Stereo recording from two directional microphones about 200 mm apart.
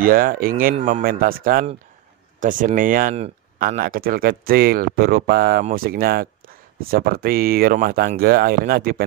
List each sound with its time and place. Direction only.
0.0 s speech: 45° right (ahead or behind)